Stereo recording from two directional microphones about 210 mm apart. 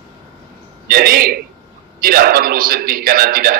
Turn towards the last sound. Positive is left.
turn(degrees=-45)  # may be behind; listen again after turning